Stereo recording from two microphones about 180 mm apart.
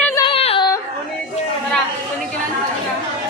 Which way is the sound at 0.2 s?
30° left (ahead or behind).